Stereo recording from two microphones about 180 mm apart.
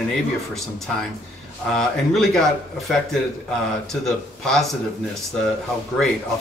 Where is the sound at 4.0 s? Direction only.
Centre (ahead or behind).